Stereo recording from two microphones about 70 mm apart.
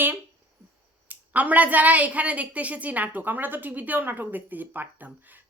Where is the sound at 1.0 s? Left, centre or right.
Right.